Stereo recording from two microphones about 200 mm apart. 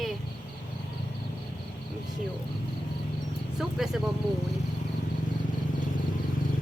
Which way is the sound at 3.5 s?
Centre (ahead or behind).